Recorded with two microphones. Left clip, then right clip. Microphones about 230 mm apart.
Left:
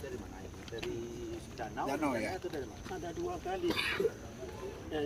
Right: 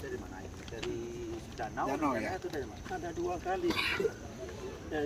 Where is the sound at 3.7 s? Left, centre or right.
Right.